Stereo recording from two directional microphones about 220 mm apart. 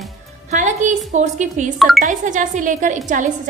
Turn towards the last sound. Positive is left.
turn(degrees=-35)  # may be behind; listen again after turning